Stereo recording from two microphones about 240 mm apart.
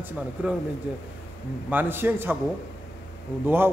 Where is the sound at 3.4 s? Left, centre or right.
Centre.